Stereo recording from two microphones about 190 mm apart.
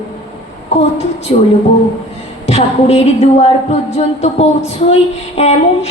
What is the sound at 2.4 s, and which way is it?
A woman's voice, 35° left (ahead or behind).